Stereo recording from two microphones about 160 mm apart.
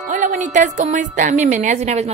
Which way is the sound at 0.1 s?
50° right (ahead or behind).